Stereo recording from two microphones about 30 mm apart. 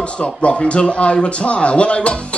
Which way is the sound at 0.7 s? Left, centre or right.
Left.